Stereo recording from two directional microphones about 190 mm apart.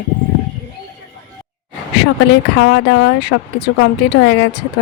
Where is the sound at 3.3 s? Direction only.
90° left.